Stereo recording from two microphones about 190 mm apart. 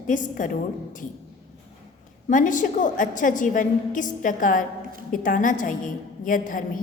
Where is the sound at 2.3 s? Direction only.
40° left (ahead or behind).